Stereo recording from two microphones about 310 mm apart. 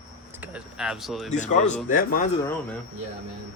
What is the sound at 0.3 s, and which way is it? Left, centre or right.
Speech, centre.